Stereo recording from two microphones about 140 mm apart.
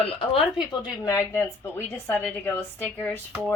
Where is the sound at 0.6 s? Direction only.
30° left (ahead or behind).